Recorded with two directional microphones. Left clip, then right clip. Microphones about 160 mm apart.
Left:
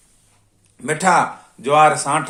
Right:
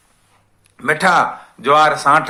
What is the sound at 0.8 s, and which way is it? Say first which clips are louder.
Speech: right 2 dB; 5° left (ahead or behind).